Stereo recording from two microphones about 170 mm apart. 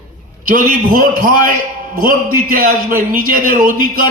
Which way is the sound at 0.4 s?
55° right (ahead or behind).